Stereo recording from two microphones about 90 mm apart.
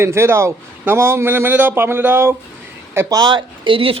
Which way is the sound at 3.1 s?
45° right (ahead or behind).